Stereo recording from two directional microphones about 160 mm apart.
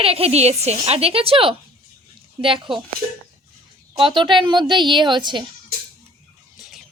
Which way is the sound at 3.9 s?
30° right (ahead or behind).